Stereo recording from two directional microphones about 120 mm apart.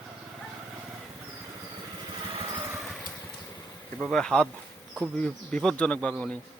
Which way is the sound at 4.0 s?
5° left (ahead or behind).